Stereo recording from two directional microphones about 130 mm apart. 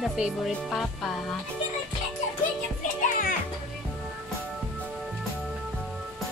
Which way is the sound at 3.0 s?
90° left.